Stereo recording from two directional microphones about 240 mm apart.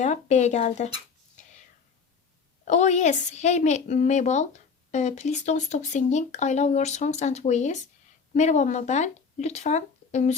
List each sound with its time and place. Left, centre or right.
0.0 s a woman's voice: left
2.6 s a woman's voice: left